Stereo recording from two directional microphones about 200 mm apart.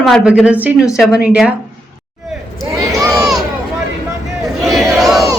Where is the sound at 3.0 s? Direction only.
15° right (ahead or behind).